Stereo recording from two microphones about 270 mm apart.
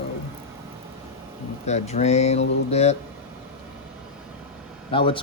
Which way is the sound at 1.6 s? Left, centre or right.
Left.